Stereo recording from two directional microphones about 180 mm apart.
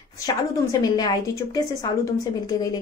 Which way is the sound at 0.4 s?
20° left (ahead or behind).